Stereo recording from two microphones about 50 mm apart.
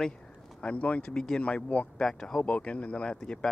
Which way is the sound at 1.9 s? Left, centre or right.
Centre.